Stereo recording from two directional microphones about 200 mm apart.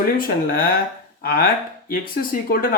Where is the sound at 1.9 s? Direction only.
45° left (ahead or behind).